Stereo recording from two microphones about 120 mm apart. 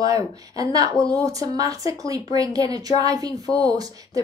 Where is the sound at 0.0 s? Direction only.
30° right (ahead or behind).